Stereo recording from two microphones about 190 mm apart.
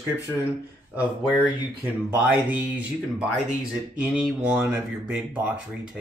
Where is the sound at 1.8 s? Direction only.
10° right (ahead or behind).